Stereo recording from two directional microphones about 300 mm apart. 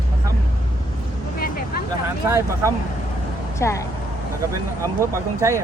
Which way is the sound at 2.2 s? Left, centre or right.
Centre.